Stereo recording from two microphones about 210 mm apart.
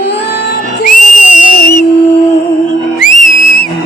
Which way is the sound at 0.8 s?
40° left (ahead or behind).